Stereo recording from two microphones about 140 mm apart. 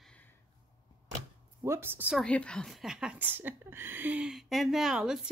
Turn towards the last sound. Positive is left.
turn(degrees=-5)  # may be behind; listen again after turning